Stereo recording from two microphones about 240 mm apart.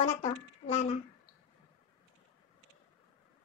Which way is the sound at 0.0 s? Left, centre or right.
Left.